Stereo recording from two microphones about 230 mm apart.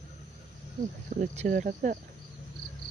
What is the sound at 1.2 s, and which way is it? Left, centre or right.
Speech, right.